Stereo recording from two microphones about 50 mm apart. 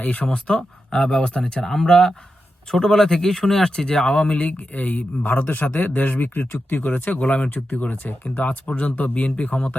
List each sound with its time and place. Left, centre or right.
0.0 s speech: left
0.3 s speech: centre
7.5 s speech: left